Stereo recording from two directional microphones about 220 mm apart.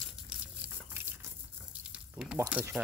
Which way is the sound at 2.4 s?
10° right (ahead or behind).